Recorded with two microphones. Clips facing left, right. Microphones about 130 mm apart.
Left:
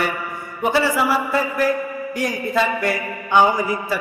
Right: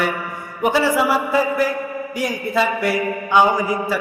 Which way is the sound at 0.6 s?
15° right (ahead or behind).